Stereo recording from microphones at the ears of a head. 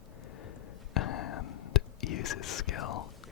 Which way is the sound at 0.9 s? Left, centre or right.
Left.